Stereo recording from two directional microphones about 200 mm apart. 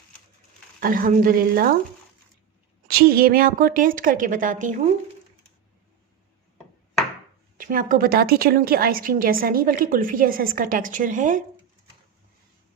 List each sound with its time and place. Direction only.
0.8 s a woman's voice: 45° right (ahead or behind)
2.8 s a woman's voice: 50° right (ahead or behind)
7.6 s a woman's voice: 45° right (ahead or behind)